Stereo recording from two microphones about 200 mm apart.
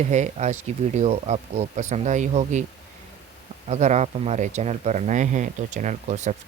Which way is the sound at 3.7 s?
35° right (ahead or behind).